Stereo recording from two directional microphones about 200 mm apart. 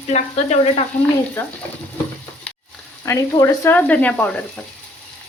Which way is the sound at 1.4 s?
10° left (ahead or behind).